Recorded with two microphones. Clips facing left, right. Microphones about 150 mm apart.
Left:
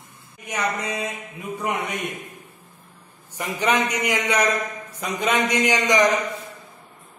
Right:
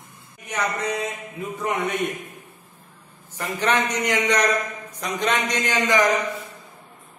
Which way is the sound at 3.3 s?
15° left (ahead or behind).